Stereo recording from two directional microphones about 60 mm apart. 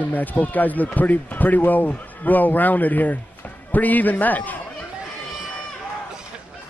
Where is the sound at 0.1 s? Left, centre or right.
Left.